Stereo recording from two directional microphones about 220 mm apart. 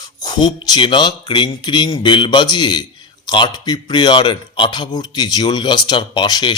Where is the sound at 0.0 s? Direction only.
20° left (ahead or behind).